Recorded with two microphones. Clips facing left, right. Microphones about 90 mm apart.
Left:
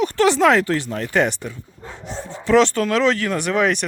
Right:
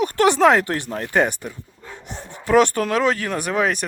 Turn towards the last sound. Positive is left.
turn(degrees=-5)  # may be behind; listen again after turning